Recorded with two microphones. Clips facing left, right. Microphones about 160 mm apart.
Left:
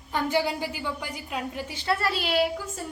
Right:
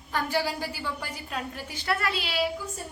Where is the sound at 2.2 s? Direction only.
50° left (ahead or behind).